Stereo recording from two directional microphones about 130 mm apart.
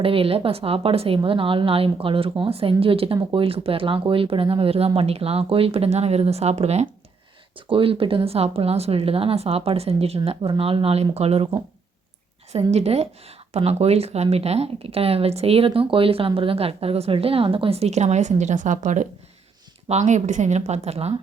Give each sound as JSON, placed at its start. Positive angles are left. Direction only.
{"t": 0.0, "sound": "speech", "side_deg": -45}
{"t": 7.5, "sound": "speech", "side_deg": -45}
{"t": 12.5, "sound": "speech", "side_deg": -55}